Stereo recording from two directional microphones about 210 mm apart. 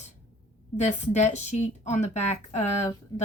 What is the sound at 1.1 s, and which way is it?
Speech, 35° left (ahead or behind).